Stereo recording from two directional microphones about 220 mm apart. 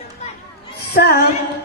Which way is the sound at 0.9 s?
45° left (ahead or behind).